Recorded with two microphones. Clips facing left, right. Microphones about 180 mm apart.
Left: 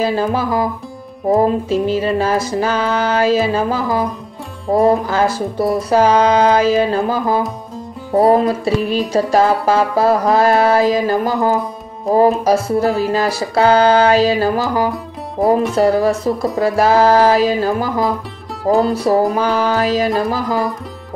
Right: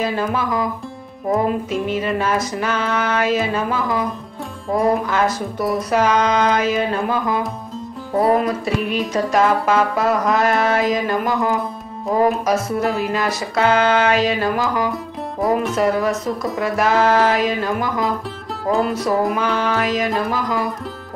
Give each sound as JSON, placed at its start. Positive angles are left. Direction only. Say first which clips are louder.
{"t": 0.0, "sound": "music", "louder": "left 4 dB", "side_deg": 35}